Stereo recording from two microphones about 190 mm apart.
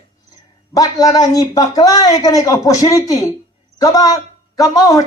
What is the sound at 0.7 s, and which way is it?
A man's voice, 20° left (ahead or behind).